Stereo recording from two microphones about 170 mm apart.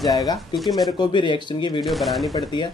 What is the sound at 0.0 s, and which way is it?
Speech, 20° left (ahead or behind).